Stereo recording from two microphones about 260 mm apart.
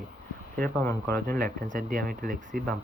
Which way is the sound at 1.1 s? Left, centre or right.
Right.